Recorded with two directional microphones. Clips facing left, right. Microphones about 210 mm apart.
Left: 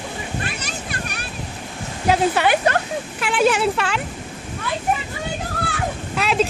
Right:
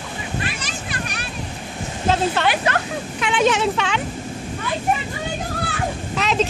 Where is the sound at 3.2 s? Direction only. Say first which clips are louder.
Even; 5° left (ahead or behind).